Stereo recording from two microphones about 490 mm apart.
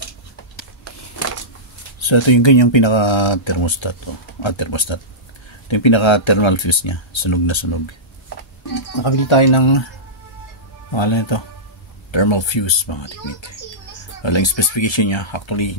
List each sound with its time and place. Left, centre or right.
2.0 s speech: left
9.0 s speech: left
10.9 s speech: left